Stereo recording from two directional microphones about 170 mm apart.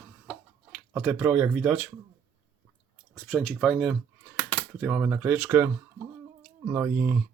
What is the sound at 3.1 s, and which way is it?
Speech, 5° left (ahead or behind).